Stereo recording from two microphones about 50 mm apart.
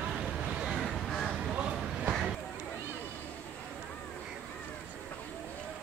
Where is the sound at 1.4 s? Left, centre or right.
Centre.